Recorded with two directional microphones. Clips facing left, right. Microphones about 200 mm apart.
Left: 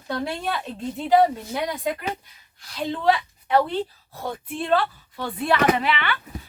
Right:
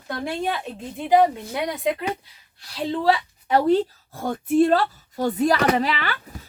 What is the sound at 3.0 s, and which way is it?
Speech, 35° right (ahead or behind).